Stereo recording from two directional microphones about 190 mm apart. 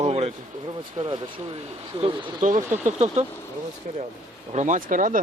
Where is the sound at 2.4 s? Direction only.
40° right (ahead or behind).